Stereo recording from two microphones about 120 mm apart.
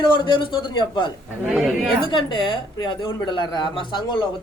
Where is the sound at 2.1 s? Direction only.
45° left (ahead or behind).